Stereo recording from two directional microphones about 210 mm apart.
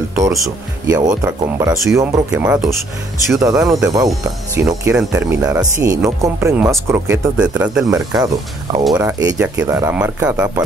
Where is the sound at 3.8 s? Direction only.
15° right (ahead or behind).